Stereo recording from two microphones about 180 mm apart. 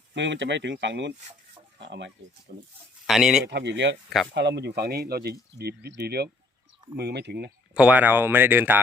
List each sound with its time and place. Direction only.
0.1 s speech: 80° right
3.1 s speech: 5° right (ahead or behind)
3.4 s speech: 75° right (ahead or behind)
7.7 s speech: 5° right (ahead or behind)